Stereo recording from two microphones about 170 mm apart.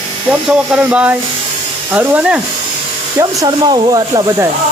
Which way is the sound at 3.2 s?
25° right (ahead or behind).